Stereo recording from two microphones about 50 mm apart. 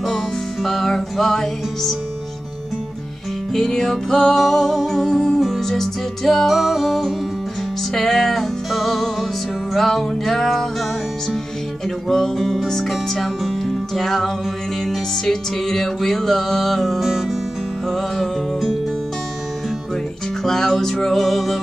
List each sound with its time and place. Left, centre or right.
0.0 s music: centre
3.5 s music: centre
6.5 s music: centre
12.1 s music: centre
20.4 s music: centre